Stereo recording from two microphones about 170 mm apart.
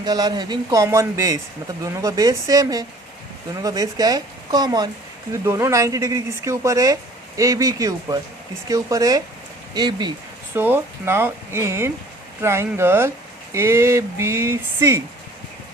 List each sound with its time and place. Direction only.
0.0 s speech: 25° right (ahead or behind)
10.5 s speech: 10° right (ahead or behind)